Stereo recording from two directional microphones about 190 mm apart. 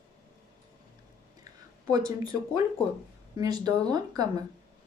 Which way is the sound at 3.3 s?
20° right (ahead or behind).